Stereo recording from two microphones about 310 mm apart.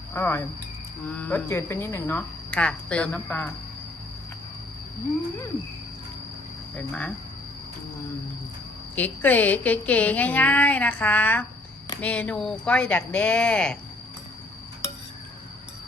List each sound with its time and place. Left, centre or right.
0.1 s a woman's voice: centre
6.7 s a woman's voice: centre
9.0 s a woman's voice: centre